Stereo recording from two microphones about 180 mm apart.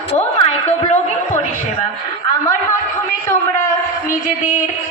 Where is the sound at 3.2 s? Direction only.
15° left (ahead or behind).